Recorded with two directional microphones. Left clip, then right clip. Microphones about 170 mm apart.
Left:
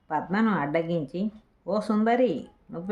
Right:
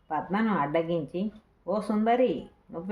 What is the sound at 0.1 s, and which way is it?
Speech, 30° left (ahead or behind).